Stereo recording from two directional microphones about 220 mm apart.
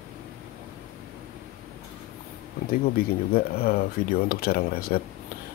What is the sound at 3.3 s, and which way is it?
Speech, 45° left (ahead or behind).